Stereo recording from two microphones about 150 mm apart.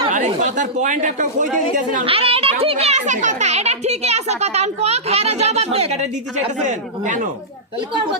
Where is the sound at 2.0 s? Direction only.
40° right (ahead or behind); by 7.3 s 55° right (ahead or behind).